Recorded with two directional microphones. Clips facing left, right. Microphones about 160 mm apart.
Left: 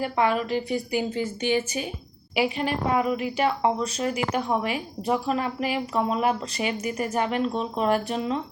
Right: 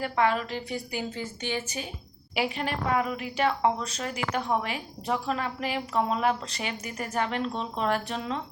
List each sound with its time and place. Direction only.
0.0 s a woman's voice: 10° left (ahead or behind)